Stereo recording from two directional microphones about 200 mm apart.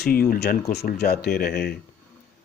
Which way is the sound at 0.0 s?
50° left (ahead or behind).